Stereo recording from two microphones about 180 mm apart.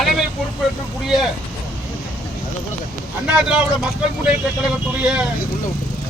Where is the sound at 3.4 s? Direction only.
5° right (ahead or behind).